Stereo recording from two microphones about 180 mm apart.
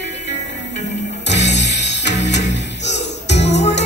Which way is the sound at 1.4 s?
75° left (ahead or behind).